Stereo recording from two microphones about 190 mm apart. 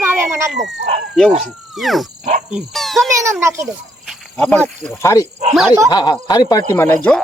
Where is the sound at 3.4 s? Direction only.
15° right (ahead or behind).